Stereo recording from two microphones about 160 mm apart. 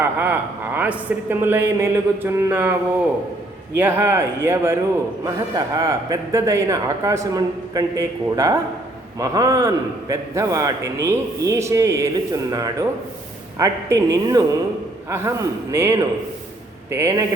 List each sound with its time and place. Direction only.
0.0 s a man's voice: 10° right (ahead or behind)
3.8 s a man's voice: 15° right (ahead or behind)